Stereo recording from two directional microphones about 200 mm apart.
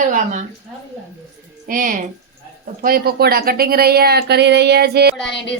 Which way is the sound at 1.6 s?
45° right (ahead or behind).